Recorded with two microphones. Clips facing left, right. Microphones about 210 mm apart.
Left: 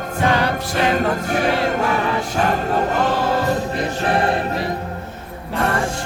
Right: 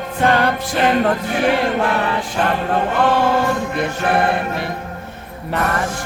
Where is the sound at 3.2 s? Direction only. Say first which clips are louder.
Right 2 dB; 35° left (ahead or behind).